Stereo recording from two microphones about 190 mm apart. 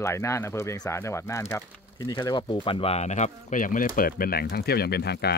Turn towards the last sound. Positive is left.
turn(degrees=60)  # may be behind; listen again after turning